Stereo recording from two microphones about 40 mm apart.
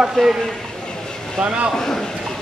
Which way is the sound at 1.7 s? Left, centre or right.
Centre.